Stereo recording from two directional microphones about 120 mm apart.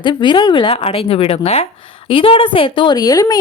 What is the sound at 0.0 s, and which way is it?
A woman's voice, 40° left (ahead or behind).